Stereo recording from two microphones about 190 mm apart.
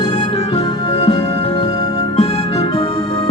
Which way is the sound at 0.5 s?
25° left (ahead or behind).